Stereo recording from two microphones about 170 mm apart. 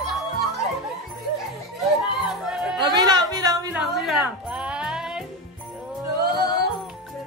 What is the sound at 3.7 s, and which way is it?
Music, centre (ahead or behind).